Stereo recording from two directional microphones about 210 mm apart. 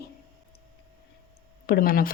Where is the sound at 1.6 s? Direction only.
45° left (ahead or behind).